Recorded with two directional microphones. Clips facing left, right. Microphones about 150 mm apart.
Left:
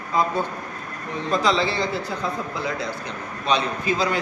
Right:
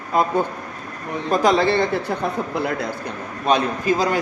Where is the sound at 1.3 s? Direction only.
50° right (ahead or behind).